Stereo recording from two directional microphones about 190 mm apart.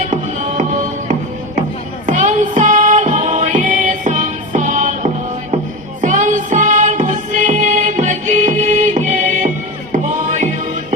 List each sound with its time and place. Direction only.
0.1 s music: 40° right (ahead or behind)
2.0 s music: 40° right (ahead or behind)